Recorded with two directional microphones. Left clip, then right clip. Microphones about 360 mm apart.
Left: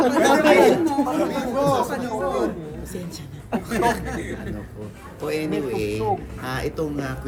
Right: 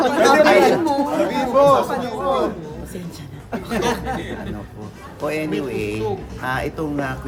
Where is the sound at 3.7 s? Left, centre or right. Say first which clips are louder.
Right 1 dB; centre.